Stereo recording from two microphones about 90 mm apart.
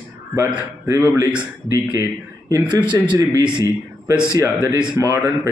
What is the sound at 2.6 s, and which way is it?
Speech, 55° right (ahead or behind).